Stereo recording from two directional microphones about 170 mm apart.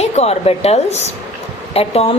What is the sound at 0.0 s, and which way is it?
Speech, 40° left (ahead or behind).